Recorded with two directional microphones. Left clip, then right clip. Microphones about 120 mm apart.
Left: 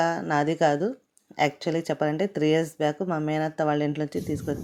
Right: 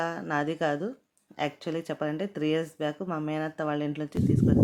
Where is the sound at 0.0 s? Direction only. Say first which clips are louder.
Left 6 dB; 30° left (ahead or behind).